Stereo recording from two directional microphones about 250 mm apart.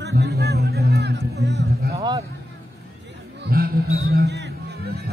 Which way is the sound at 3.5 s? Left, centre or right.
Right.